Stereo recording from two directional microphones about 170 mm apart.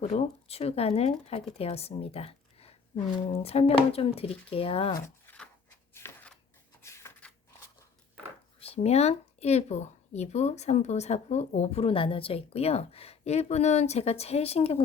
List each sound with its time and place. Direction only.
0.0 s speech: 40° left (ahead or behind)
4.9 s a sound: 15° left (ahead or behind)
8.6 s speech: 35° left (ahead or behind)